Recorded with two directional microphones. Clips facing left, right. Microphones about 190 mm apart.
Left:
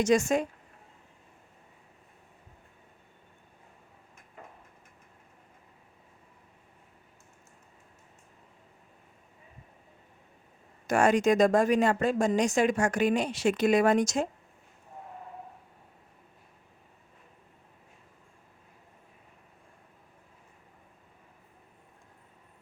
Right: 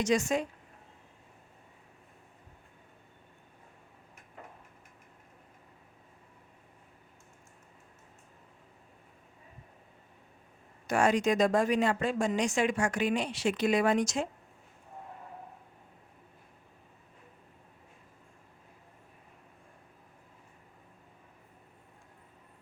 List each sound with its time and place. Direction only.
0.0 s a woman's voice: 45° left (ahead or behind)
10.8 s a woman's voice: 50° left (ahead or behind)